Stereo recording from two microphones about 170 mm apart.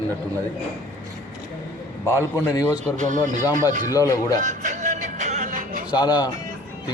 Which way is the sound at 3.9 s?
20° left (ahead or behind).